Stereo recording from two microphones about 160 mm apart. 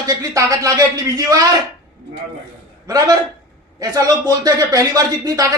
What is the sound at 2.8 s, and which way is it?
Speech, 20° right (ahead or behind).